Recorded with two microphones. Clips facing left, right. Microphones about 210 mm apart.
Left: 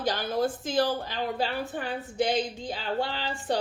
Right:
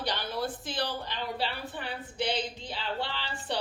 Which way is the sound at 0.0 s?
45° left (ahead or behind).